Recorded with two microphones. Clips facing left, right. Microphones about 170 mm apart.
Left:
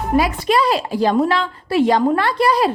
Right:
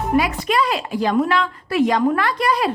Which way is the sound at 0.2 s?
35° left (ahead or behind).